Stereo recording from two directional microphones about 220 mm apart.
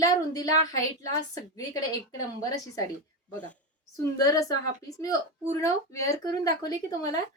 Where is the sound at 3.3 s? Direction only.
5° left (ahead or behind).